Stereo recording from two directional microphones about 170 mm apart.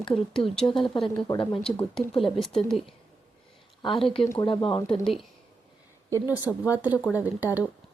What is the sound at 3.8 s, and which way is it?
Speech, 30° left (ahead or behind).